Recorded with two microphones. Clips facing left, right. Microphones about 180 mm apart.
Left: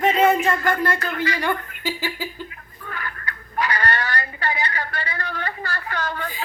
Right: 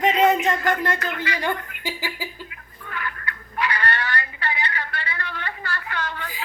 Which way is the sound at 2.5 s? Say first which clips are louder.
Left 3 dB; 40° left (ahead or behind).